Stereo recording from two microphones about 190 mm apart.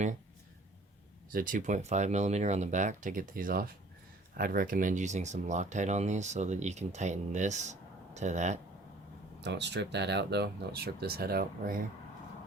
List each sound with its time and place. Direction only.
1.3 s speech: 45° right (ahead or behind)
9.4 s speech: 65° right (ahead or behind)